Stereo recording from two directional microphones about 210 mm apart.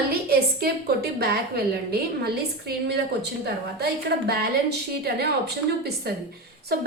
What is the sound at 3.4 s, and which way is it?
A woman's voice, 50° right (ahead or behind).